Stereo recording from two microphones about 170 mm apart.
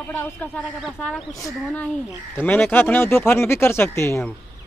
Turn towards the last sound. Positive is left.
turn(degrees=15)  # may be behind; listen again after turning